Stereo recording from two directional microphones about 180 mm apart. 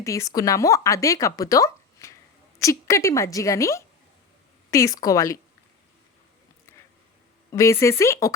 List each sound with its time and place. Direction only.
0.0 s a woman's voice: 15° left (ahead or behind)
7.5 s a woman's voice: 15° left (ahead or behind)